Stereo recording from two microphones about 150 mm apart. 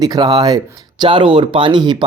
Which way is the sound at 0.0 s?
25° right (ahead or behind).